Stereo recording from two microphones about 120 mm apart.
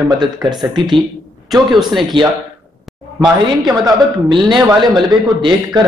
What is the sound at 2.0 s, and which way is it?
A man's voice, 40° right (ahead or behind).